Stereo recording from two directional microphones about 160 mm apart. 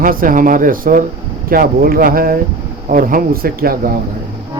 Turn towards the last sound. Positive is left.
turn(degrees=-70)  # may be behind; listen again after turning